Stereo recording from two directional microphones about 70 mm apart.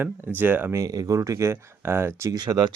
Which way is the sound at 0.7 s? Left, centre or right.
Right.